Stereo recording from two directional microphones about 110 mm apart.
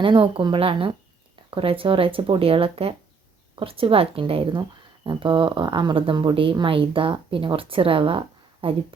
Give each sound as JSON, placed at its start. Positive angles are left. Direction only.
{"t": 0.0, "sound": "speech", "side_deg": -50}